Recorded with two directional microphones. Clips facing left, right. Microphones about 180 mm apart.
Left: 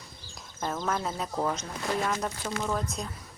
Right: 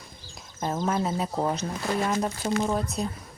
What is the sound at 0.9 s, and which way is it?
Speech, 20° right (ahead or behind).